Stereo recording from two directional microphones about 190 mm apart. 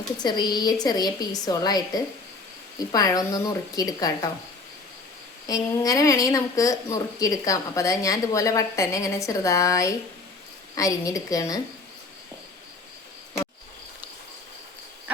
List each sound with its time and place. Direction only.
0.2 s a woman's voice: 20° left (ahead or behind)
5.5 s a woman's voice: 20° left (ahead or behind)